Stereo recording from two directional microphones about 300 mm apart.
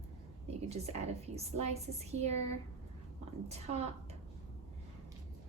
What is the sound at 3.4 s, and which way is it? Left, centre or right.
Speech, right.